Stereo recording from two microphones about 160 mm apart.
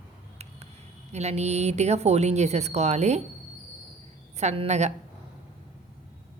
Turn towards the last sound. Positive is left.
turn(degrees=-45)  # may be behind; listen again after turning